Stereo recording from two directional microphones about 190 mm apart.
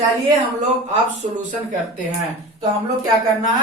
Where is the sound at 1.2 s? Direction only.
45° right (ahead or behind).